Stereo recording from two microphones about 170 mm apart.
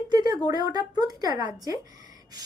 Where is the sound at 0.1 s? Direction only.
25° right (ahead or behind).